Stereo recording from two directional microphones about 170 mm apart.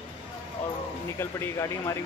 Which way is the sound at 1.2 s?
15° left (ahead or behind).